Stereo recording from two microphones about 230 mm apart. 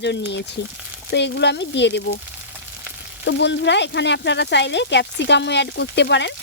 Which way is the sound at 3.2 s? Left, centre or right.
Left.